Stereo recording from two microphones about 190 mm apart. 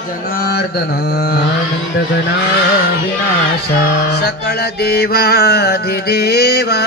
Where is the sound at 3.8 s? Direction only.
60° left (ahead or behind).